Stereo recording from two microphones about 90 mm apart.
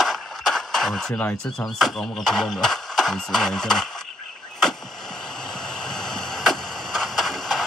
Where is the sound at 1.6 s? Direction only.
Centre (ahead or behind).